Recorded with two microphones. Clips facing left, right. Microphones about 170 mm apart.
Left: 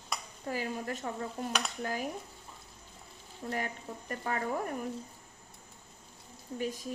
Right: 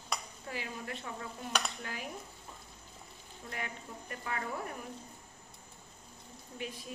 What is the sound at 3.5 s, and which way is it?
Speech, 40° left (ahead or behind).